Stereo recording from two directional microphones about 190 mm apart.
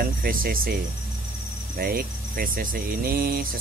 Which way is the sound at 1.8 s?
50° right (ahead or behind).